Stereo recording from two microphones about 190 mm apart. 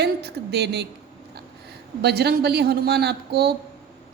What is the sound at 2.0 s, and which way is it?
A woman's voice, 55° right (ahead or behind).